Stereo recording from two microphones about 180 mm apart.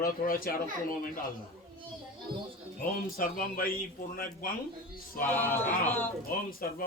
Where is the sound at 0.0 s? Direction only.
55° left (ahead or behind).